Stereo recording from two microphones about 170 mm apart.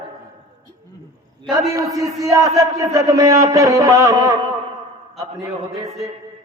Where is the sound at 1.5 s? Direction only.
20° right (ahead or behind).